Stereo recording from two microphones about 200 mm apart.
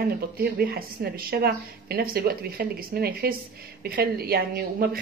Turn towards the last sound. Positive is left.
turn(degrees=-50)  # may be behind; listen again after turning